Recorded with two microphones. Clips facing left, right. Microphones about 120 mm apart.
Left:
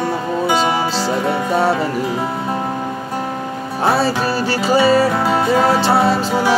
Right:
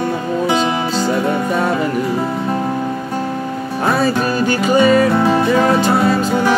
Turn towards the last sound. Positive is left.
turn(degrees=30)  # may be behind; listen again after turning